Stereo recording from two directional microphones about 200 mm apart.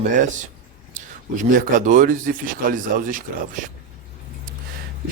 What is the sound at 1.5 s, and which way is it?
Speech, 40° right (ahead or behind).